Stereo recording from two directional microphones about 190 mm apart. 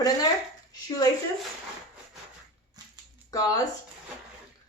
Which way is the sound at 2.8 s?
20° right (ahead or behind).